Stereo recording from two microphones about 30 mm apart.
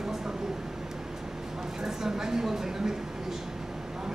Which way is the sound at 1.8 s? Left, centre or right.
Centre.